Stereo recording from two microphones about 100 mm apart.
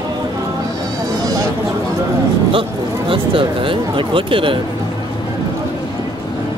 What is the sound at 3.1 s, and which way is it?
Speech, 60° right (ahead or behind).